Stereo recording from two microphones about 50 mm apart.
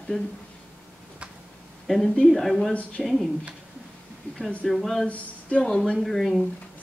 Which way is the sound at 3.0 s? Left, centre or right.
Centre.